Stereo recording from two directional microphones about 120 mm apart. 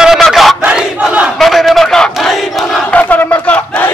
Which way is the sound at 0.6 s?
10° right (ahead or behind).